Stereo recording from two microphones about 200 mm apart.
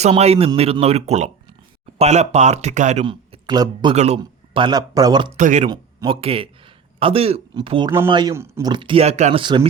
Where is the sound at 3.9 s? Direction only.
35° right (ahead or behind).